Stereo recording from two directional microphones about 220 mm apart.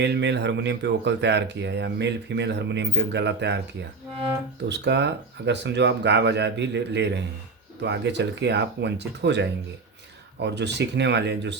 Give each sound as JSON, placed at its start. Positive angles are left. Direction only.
{"t": 0.0, "sound": "speech", "side_deg": -50}
{"t": 4.7, "sound": "speech", "side_deg": -50}